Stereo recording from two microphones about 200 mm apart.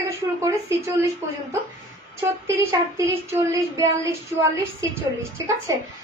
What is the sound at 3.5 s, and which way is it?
Speech, 15° right (ahead or behind).